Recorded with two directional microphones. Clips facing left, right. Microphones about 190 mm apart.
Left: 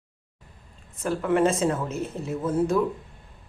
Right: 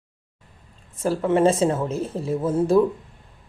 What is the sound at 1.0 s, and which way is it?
Speech, 30° right (ahead or behind).